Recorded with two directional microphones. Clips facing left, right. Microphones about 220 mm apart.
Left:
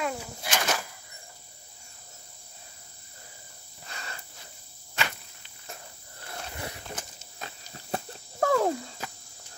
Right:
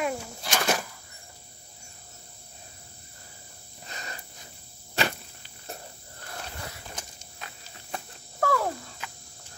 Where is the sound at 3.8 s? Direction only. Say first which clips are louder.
Right 1 dB; 20° right (ahead or behind).